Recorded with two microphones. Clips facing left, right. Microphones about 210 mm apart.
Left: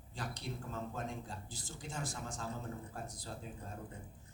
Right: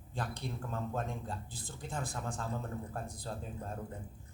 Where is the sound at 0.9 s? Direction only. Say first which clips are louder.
Right 4 dB; 55° right (ahead or behind).